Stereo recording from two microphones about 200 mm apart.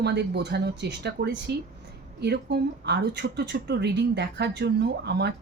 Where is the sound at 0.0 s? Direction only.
55° right (ahead or behind).